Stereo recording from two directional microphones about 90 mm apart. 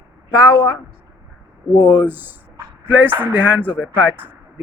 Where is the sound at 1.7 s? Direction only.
55° left (ahead or behind).